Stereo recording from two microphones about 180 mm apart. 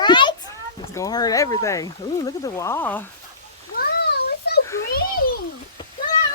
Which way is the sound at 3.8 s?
65° left (ahead or behind).